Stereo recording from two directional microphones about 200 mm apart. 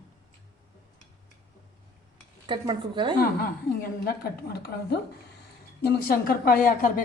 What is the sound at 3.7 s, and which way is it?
A woman's voice, 50° left (ahead or behind).